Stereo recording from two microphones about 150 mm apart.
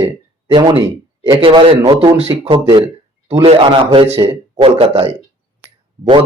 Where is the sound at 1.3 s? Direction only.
35° right (ahead or behind).